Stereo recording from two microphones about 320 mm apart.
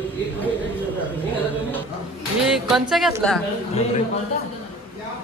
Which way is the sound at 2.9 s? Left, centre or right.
Centre.